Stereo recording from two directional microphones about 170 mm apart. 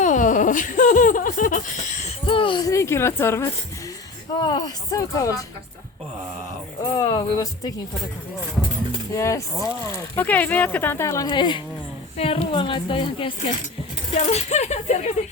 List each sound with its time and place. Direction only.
0.0 s a sound: 50° left (ahead or behind)
2.2 s speech: 30° left (ahead or behind)
6.9 s speech: 25° left (ahead or behind)
9.1 s speech: 20° left (ahead or behind)
11.3 s a woman's voice: 25° left (ahead or behind)